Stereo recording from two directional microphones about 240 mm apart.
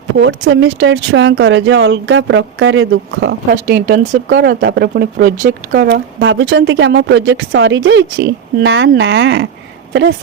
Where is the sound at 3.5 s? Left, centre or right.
Right.